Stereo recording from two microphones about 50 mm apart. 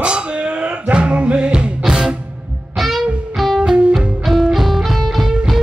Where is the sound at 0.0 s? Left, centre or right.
Right.